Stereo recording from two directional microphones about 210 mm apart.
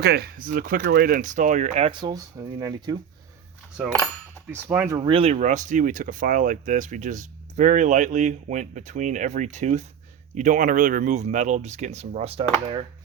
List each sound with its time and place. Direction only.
0.0 s speech: 50° right (ahead or behind); by 3.0 s 20° right (ahead or behind)
3.8 s speech: 5° right (ahead or behind)
4.9 s speech: 25° right (ahead or behind)